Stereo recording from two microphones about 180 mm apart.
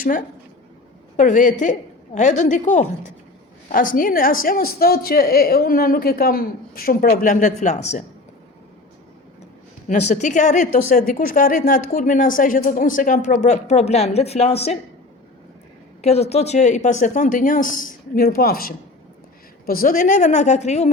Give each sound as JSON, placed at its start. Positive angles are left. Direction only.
{"t": 0.0, "sound": "a woman's voice", "side_deg": 50}
{"t": 9.9, "sound": "speech", "side_deg": 40}
{"t": 16.0, "sound": "speech", "side_deg": 35}